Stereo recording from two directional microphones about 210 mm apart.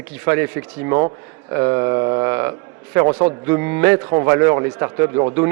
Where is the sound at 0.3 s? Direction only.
10° right (ahead or behind).